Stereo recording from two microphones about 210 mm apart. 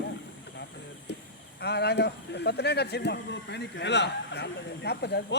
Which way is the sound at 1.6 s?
50° left (ahead or behind).